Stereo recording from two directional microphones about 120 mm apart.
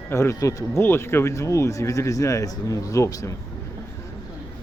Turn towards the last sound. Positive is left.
turn(degrees=30)  # may be behind; listen again after turning